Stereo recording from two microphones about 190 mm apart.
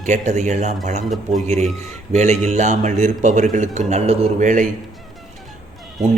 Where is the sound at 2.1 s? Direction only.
35° right (ahead or behind).